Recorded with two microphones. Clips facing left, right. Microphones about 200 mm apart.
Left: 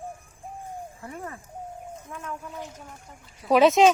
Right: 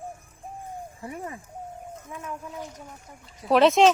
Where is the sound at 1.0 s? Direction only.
15° right (ahead or behind).